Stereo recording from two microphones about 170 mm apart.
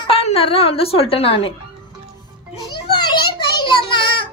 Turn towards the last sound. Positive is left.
turn(degrees=25)  # may be behind; listen again after turning